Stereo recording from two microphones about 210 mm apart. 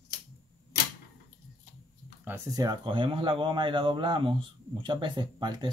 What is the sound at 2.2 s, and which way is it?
Speech, 15° right (ahead or behind).